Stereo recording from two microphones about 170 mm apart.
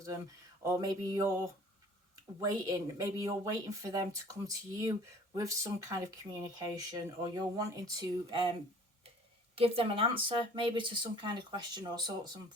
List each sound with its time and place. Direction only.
0.6 s speech: 20° right (ahead or behind)
2.4 s speech: 20° right (ahead or behind)
9.6 s speech: 35° right (ahead or behind)